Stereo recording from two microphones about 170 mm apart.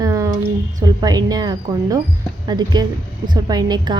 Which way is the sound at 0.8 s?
20° right (ahead or behind).